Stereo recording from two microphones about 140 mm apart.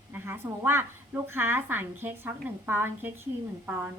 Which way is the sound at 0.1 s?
15° right (ahead or behind).